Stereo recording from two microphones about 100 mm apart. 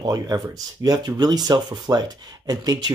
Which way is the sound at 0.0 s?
40° right (ahead or behind).